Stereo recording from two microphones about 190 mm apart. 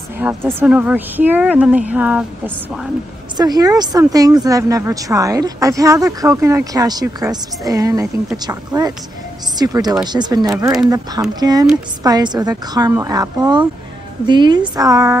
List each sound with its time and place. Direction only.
0.2 s speech: 10° right (ahead or behind)
3.3 s a woman's voice: 20° right (ahead or behind)